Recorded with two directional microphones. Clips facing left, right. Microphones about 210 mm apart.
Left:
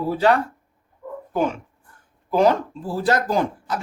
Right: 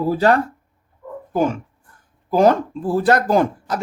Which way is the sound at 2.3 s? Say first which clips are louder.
Right 3 dB; 45° right (ahead or behind).